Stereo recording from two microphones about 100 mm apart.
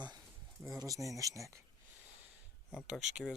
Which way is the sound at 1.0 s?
35° right (ahead or behind).